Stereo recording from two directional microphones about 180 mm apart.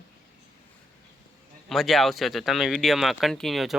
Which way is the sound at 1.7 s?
Centre (ahead or behind).